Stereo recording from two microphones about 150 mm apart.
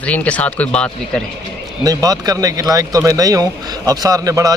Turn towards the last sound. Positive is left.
turn(degrees=-25)  # may be behind; listen again after turning